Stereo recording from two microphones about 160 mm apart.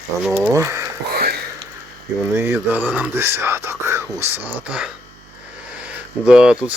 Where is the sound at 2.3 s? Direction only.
15° right (ahead or behind).